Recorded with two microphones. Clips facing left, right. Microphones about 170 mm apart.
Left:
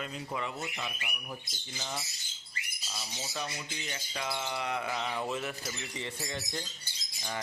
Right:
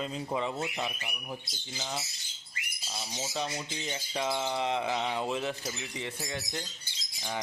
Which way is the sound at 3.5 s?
25° right (ahead or behind).